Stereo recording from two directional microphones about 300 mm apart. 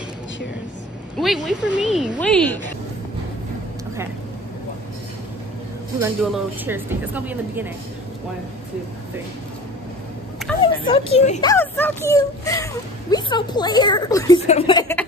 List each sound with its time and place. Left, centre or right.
1.1 s speech: centre
5.9 s speech: centre
10.6 s speech: centre
11.5 s a woman's voice: centre